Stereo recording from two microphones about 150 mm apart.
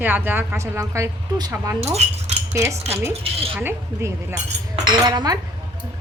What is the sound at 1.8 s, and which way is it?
Speech, 45° right (ahead or behind).